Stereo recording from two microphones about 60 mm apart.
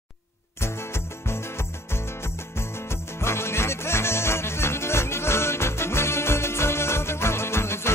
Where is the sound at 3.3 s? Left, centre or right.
Left.